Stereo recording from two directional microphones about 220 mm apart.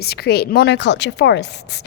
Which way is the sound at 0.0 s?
45° left (ahead or behind).